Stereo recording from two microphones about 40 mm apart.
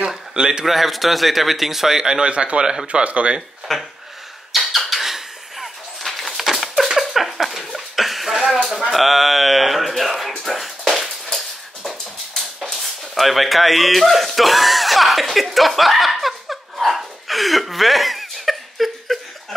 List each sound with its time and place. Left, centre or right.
0.0 s a sound: centre
0.7 s a man's voice: centre
2.3 s a man's voice: right
2.6 s speech: centre
2.9 s speech: right
3.7 s speech: centre
4.5 s squeak: centre
6.0 s a sound: centre
12.4 s a sound: centre